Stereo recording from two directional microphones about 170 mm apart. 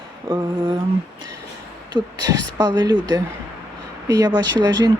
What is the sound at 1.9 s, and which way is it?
Speech, 25° right (ahead or behind).